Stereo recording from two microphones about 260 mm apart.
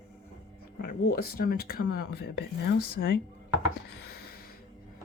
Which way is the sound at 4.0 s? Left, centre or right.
Left.